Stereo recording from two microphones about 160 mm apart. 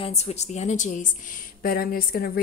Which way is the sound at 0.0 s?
40° left (ahead or behind).